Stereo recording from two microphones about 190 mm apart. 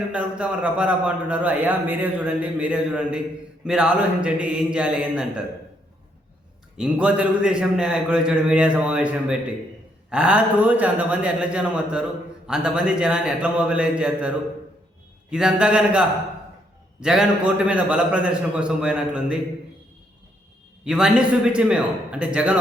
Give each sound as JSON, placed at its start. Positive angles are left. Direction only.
{"t": 0.1, "sound": "a man's voice", "side_deg": -5}
{"t": 6.7, "sound": "a man's voice", "side_deg": -5}
{"t": 20.8, "sound": "a man's voice", "side_deg": -5}